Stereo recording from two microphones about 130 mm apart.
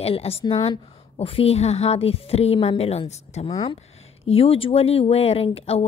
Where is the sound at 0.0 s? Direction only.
50° left (ahead or behind).